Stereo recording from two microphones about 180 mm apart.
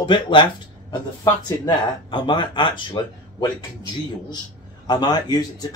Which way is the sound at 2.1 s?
25° left (ahead or behind).